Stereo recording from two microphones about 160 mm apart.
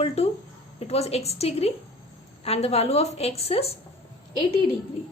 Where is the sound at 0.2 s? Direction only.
40° left (ahead or behind).